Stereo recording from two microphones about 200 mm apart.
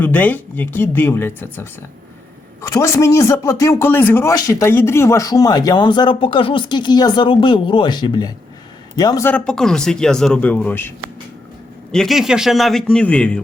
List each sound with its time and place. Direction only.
0.0 s a man's voice: 10° left (ahead or behind)